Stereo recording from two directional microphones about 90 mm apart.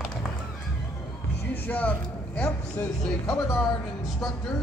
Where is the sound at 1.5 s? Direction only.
20° left (ahead or behind).